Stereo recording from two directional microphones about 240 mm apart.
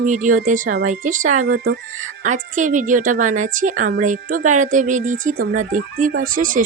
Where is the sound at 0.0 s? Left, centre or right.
Right.